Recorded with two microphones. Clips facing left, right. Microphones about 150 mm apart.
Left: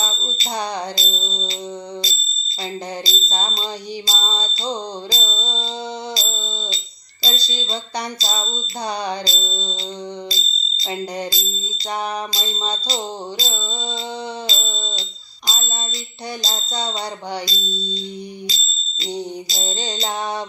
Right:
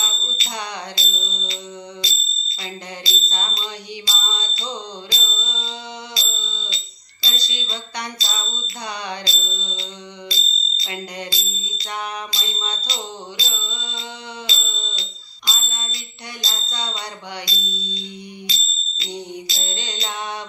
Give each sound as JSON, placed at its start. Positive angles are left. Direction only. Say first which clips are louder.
{"t": 0.0, "sound": "music", "louder": "left 5 dB", "side_deg": 35}
{"t": 3.0, "sound": "music", "louder": "left 4 dB", "side_deg": 40}
{"t": 6.1, "sound": "a sound", "louder": "left 5 dB", "side_deg": 35}
{"t": 18.5, "sound": "music", "louder": "left 1 dB", "side_deg": 35}